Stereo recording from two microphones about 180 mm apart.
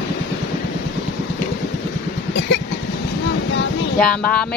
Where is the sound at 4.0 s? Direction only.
5° left (ahead or behind).